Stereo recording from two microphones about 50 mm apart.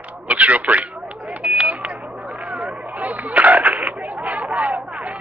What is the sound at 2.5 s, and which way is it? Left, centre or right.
Skateboard, right.